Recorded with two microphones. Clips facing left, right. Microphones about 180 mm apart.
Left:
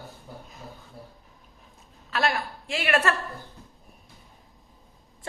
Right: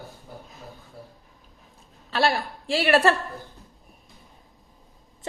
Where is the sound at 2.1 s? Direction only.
30° right (ahead or behind).